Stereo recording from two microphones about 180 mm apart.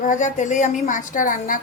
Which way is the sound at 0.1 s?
45° left (ahead or behind).